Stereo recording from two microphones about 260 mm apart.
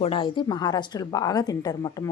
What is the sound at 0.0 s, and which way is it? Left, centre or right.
A woman's voice, centre.